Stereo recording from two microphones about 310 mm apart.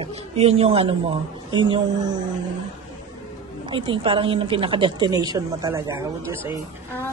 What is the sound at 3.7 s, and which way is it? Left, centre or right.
A woman's voice, centre.